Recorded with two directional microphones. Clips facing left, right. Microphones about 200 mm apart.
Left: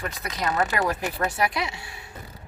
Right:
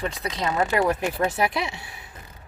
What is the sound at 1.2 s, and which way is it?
Speech, 25° right (ahead or behind).